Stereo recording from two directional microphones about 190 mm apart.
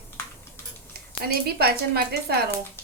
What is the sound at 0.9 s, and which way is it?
Speech, 55° right (ahead or behind).